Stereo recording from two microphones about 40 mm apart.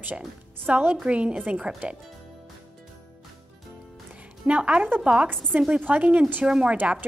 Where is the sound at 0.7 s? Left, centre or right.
Right.